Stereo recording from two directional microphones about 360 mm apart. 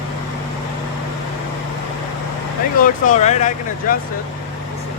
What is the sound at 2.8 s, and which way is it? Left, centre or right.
Speech, centre.